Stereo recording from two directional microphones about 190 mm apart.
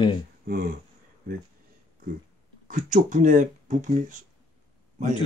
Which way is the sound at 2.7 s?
45° right (ahead or behind).